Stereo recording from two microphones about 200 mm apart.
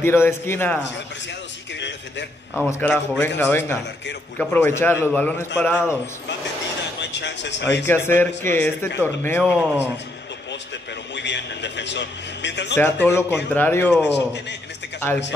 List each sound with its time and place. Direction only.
0.0 s a man's voice: 10° left (ahead or behind)
1.8 s a sound: 60° left (ahead or behind)
2.7 s a man's voice: 5° left (ahead or behind)
7.0 s speech: 60° left (ahead or behind)
7.7 s a man's voice: 10° left (ahead or behind)
11.1 s a man's voice: 60° left (ahead or behind)
12.7 s a man's voice: 10° left (ahead or behind)
14.0 s a man's voice: 60° left (ahead or behind)